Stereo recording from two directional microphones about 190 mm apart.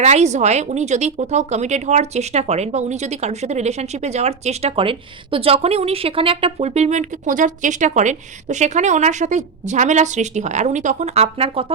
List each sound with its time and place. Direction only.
0.0 s speech: 35° right (ahead or behind)